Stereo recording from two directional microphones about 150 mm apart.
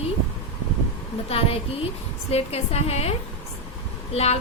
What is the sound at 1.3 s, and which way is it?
A woman's voice, 40° left (ahead or behind).